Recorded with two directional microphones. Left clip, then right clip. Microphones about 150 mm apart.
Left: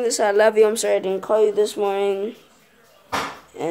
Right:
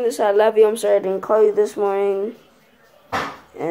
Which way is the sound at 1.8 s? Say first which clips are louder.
Right 2 dB; 10° left (ahead or behind).